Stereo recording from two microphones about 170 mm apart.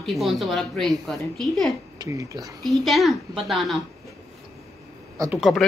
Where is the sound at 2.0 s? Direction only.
20° right (ahead or behind).